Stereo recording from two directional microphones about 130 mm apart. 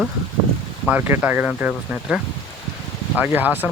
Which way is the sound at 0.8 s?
15° right (ahead or behind).